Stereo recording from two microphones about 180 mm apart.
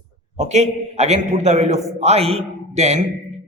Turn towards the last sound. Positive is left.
turn(degrees=-40)  # may be behind; listen again after turning